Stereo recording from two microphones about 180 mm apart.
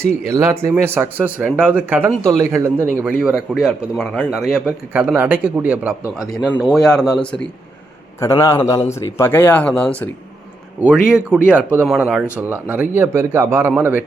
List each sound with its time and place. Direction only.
0.3 s a man's voice: 15° right (ahead or behind); by 7.4 s 5° left (ahead or behind)
8.2 s speech: 15° left (ahead or behind)
10.8 s speech: 5° right (ahead or behind)